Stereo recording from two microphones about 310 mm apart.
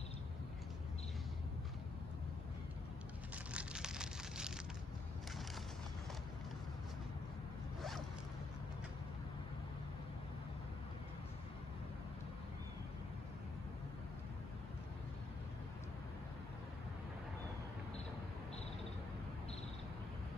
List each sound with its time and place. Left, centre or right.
3.5 s rain on surface: centre